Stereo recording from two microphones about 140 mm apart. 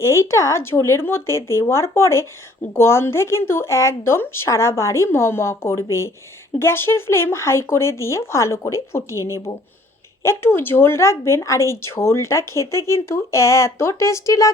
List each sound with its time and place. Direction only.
0.0 s speech: 20° left (ahead or behind)